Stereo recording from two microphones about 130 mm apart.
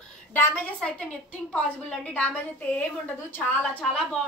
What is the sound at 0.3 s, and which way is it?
A woman's voice, 15° left (ahead or behind).